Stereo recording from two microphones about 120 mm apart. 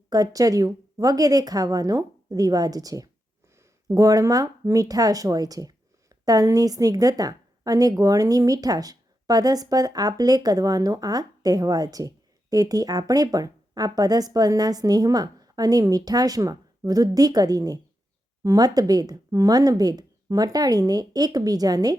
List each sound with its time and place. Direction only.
0.1 s speech: 30° right (ahead or behind)